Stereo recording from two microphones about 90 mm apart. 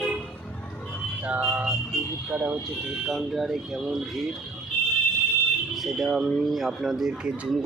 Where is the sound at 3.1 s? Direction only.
Centre (ahead or behind).